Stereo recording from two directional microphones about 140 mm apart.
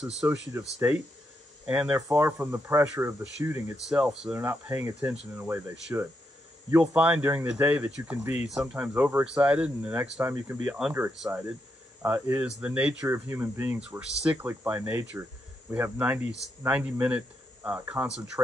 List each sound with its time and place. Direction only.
0.0 s speech: 5° right (ahead or behind)
2.0 s speech: 20° right (ahead or behind)
3.9 s speech: 5° right (ahead or behind)
4.4 s speech: 15° right (ahead or behind)